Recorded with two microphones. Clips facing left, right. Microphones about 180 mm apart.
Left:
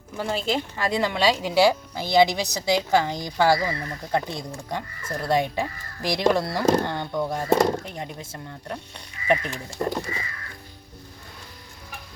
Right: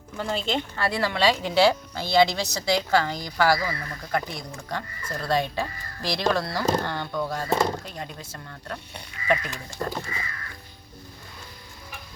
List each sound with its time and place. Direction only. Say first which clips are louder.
0.2 s speech: left 2 dB; 5° left (ahead or behind)
0.8 s speech: even; 20° left (ahead or behind)